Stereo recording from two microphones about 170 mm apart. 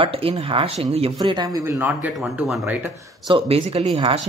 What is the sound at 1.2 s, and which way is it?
Speech, 25° right (ahead or behind).